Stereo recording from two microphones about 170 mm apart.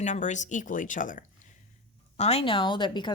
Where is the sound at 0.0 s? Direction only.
45° left (ahead or behind).